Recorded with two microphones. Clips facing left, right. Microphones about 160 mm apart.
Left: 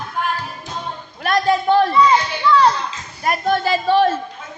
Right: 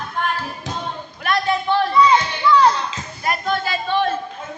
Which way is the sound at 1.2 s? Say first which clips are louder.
Left 4 dB; 40° left (ahead or behind).